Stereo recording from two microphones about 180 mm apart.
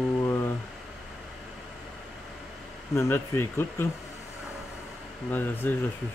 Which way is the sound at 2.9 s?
15° left (ahead or behind).